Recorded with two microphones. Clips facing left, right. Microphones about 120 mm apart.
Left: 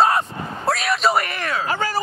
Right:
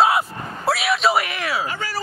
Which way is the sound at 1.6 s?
50° left (ahead or behind).